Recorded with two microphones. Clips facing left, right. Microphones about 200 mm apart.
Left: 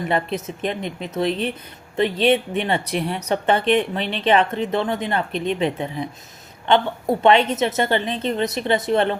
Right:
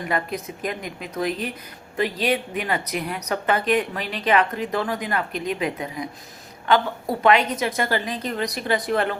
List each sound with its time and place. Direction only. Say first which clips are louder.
0.1 s speech: left 2 dB; 25° left (ahead or behind)